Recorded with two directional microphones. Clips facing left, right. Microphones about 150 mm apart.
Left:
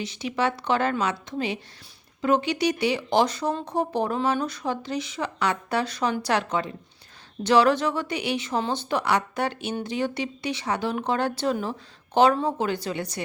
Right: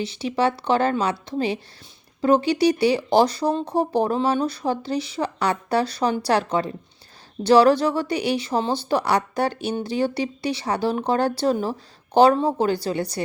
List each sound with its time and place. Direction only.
0.0 s speech: 30° right (ahead or behind)